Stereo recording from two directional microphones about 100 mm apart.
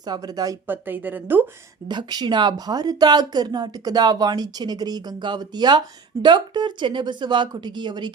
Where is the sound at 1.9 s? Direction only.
45° right (ahead or behind).